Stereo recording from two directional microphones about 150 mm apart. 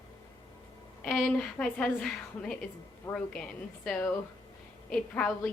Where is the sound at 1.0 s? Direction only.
5° left (ahead or behind).